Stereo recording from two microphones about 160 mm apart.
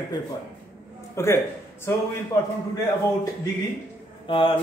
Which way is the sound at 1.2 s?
20° left (ahead or behind).